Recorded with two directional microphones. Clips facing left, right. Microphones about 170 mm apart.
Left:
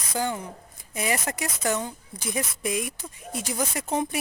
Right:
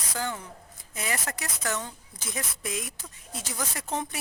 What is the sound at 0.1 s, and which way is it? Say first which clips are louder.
Speech: left 5 dB; 15° left (ahead or behind).